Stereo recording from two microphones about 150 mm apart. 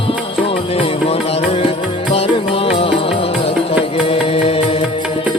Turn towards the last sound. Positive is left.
turn(degrees=40)  # may be behind; listen again after turning